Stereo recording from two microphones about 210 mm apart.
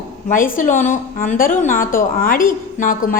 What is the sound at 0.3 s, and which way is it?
A woman's voice, 40° left (ahead or behind).